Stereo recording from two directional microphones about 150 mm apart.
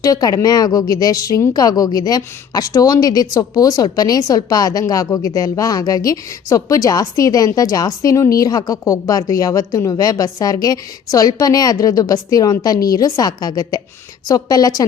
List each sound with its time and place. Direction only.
0.0 s speech: 25° left (ahead or behind)